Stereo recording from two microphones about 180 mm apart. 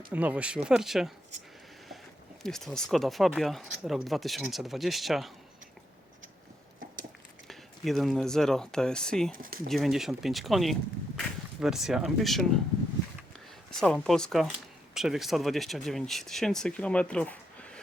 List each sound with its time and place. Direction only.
0.1 s speech: 10° right (ahead or behind)
2.4 s speech: centre (ahead or behind)
7.4 s speech: centre (ahead or behind)
9.3 s speech: 50° right (ahead or behind)
9.6 s speech: centre (ahead or behind)
13.7 s speech: 5° left (ahead or behind)